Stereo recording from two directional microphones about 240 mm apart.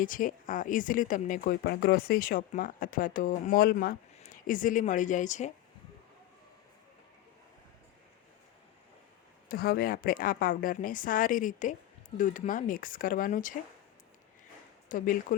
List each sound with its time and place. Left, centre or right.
0.0 s speech: left
9.5 s speech: left
14.8 s speech: left